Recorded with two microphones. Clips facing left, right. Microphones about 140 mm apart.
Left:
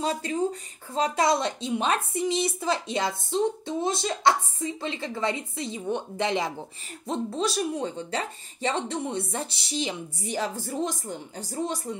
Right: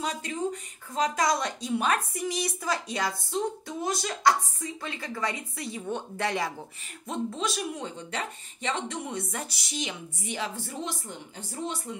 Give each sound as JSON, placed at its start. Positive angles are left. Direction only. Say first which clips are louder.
{"t": 0.0, "sound": "speech", "louder": "left 4 dB", "side_deg": 30}
{"t": 7.1, "sound": "speech", "louder": "left 3 dB", "side_deg": 35}